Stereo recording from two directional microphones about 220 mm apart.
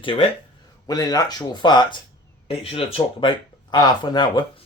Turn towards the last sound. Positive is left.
turn(degrees=20)  # may be behind; listen again after turning